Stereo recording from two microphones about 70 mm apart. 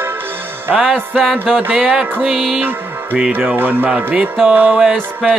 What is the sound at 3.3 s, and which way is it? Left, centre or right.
Music, right.